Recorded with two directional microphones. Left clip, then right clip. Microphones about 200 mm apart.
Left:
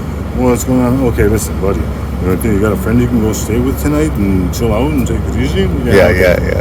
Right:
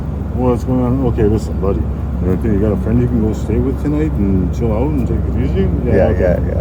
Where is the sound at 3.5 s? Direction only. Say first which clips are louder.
Left 3 dB; 15° left (ahead or behind).